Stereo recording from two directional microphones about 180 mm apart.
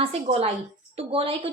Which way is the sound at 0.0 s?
35° right (ahead or behind).